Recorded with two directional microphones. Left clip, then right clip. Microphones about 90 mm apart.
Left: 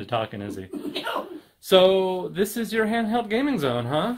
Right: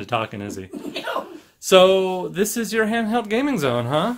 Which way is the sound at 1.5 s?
30° right (ahead or behind).